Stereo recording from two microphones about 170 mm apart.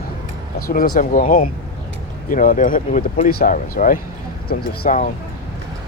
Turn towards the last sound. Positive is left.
turn(degrees=55)  # may be behind; listen again after turning